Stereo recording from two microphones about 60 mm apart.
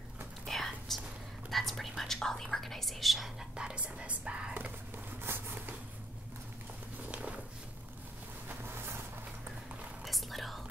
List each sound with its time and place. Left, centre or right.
0.5 s whispering: centre
2.1 s speech: centre
3.5 s speech: centre
5.2 s a sound: right
7.1 s a sound: right
8.5 s vehicle: right
10.0 s whispering: centre